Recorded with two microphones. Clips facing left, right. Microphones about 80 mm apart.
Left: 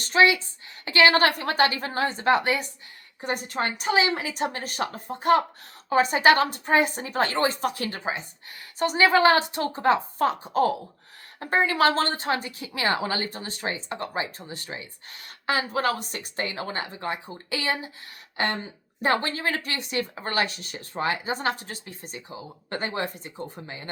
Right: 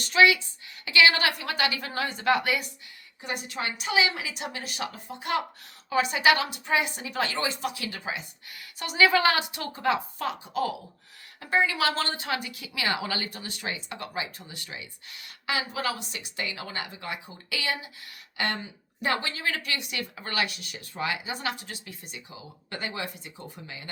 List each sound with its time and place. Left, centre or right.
0.0 s a woman's voice: left